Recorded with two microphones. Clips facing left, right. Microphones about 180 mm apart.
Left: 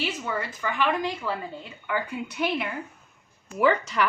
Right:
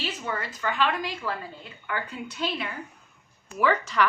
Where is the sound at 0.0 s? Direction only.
10° left (ahead or behind).